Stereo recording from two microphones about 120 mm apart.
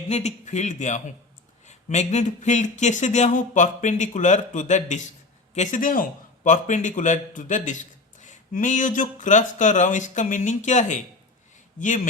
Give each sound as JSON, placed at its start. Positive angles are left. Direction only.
{"t": 0.1, "sound": "speech", "side_deg": 70}
{"t": 1.6, "sound": "a man's voice", "side_deg": 75}